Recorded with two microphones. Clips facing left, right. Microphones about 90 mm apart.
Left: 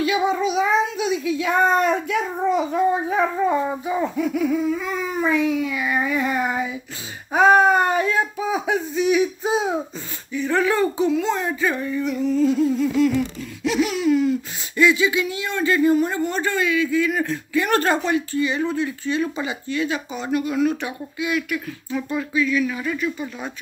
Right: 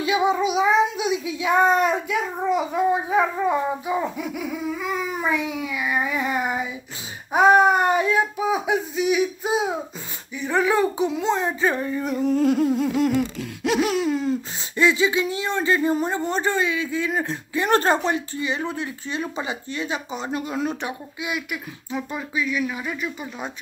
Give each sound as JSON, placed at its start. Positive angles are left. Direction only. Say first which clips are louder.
{"t": 0.0, "sound": "a child's voice", "louder": "even", "side_deg": -20}
{"t": 21.2, "sound": "speech", "louder": "left 6 dB", "side_deg": -15}